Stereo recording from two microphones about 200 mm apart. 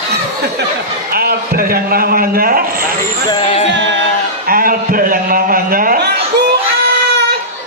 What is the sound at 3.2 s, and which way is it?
Music, 25° left (ahead or behind).